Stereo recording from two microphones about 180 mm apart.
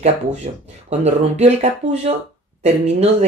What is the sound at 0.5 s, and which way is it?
Speech, 40° right (ahead or behind).